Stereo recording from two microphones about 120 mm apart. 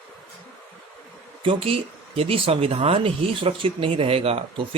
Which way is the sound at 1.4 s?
50° right (ahead or behind).